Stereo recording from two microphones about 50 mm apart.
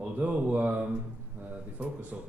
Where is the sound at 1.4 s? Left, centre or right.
Right.